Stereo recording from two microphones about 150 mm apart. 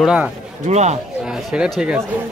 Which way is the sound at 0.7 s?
50° right (ahead or behind).